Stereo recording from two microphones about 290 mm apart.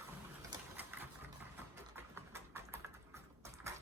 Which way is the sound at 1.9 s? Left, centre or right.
Centre.